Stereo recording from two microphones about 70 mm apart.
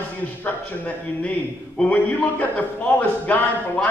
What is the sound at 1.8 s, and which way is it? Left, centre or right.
A man's voice, left.